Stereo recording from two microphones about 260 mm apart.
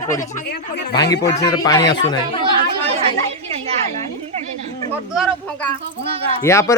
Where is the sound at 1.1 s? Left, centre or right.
Centre.